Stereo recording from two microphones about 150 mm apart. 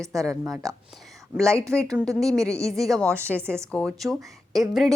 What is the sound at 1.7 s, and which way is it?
A woman's voice, 15° right (ahead or behind).